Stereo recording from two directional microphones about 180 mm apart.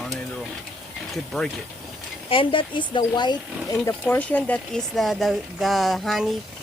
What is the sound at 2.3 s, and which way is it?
Speech, 30° left (ahead or behind).